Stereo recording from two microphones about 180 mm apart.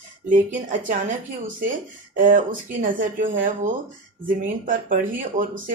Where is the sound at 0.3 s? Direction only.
50° right (ahead or behind).